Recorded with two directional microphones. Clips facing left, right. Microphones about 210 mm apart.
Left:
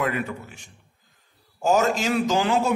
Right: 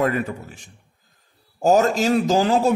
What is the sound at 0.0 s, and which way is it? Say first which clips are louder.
Speech: right 5 dB; 40° right (ahead or behind).